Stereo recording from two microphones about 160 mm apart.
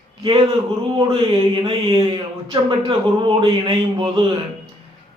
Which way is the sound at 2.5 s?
30° right (ahead or behind).